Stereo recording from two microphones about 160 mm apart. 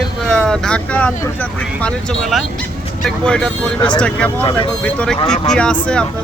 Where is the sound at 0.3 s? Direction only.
5° left (ahead or behind).